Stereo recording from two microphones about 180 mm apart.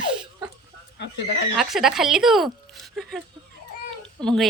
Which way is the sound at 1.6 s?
Centre (ahead or behind).